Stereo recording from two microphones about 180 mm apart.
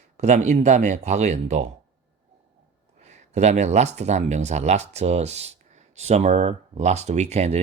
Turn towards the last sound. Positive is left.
turn(degrees=-40)  # may be behind; listen again after turning